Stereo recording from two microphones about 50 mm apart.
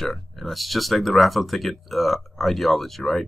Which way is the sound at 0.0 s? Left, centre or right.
Centre.